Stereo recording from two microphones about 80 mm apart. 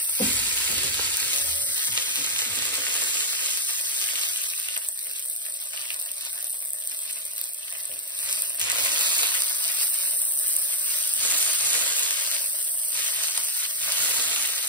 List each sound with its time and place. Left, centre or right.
0.3 s frying: centre
1.7 s sizzle: right
2.2 s frying: left
2.9 s frying: left
3.4 s water: left
8.5 s a sound: left
8.9 s water: centre
10.9 s a sound: centre
13.5 s sizzle: centre